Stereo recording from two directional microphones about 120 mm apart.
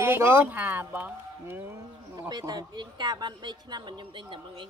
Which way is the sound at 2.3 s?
35° right (ahead or behind).